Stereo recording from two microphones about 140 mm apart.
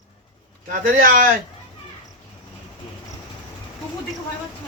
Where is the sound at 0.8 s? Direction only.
85° right.